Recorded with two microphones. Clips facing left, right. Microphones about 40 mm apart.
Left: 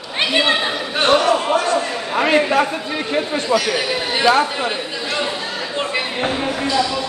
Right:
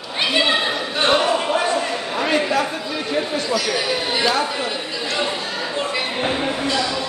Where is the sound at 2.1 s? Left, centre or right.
Left.